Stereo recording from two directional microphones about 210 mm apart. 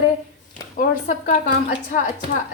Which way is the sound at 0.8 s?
40° left (ahead or behind).